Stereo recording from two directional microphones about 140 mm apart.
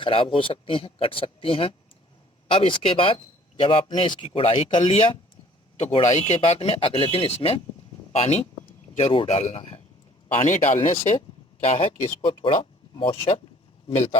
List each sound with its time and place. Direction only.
0.0 s speech: 40° left (ahead or behind)
10.4 s speech: 55° left (ahead or behind)
12.2 s speech: 40° left (ahead or behind)